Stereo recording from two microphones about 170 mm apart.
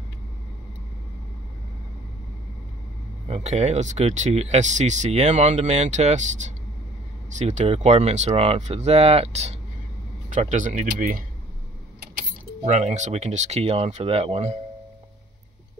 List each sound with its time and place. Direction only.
3.3 s speech: 40° right (ahead or behind)
12.6 s speech: 45° right (ahead or behind)